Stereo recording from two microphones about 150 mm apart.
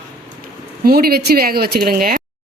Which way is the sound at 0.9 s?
90° right.